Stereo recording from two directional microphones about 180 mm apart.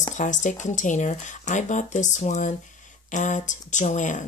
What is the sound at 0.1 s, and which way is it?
Speech, 45° left (ahead or behind).